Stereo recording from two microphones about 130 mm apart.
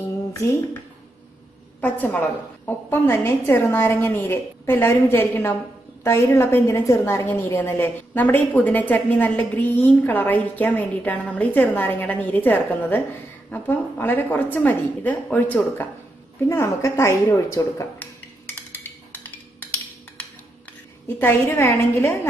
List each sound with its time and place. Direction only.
1.8 s a woman's voice: 10° left (ahead or behind)
21.2 s a woman's voice: 15° left (ahead or behind)